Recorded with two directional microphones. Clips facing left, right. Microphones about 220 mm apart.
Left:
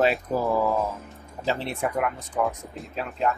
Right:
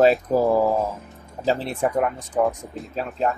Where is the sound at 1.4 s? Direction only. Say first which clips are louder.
Right 5 dB; 35° right (ahead or behind).